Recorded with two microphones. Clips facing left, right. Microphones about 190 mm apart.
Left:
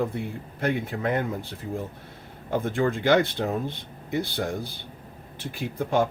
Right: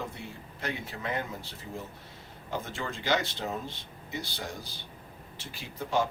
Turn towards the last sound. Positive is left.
turn(degrees=55)  # may be behind; listen again after turning